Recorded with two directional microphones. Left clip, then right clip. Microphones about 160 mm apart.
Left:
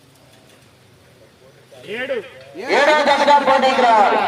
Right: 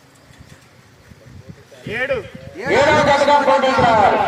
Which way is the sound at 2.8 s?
45° left (ahead or behind).